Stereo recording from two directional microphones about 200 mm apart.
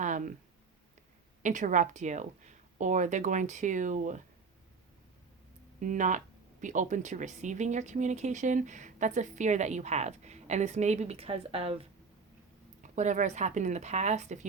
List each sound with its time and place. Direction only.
0.0 s a sound: 40° right (ahead or behind)
1.4 s speech: 40° right (ahead or behind)
5.8 s speech: 40° right (ahead or behind)